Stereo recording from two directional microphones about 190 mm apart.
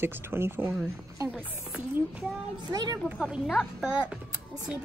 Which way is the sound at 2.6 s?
20° right (ahead or behind).